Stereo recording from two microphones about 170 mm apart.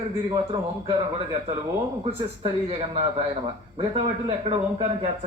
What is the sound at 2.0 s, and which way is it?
Speech, 35° right (ahead or behind).